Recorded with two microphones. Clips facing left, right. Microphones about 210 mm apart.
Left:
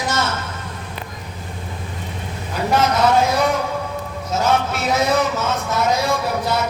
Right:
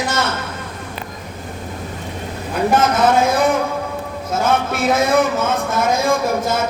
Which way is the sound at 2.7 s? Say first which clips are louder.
Right 1 dB; 50° right (ahead or behind).